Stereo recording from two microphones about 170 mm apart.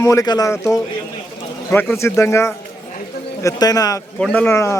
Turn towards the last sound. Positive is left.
turn(degrees=15)  # may be behind; listen again after turning